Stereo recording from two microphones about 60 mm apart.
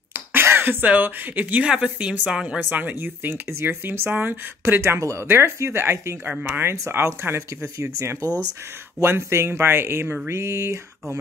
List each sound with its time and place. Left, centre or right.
0.1 s speech: right
1.6 s a woman's voice: centre
2.7 s speech: right
9.0 s speech: right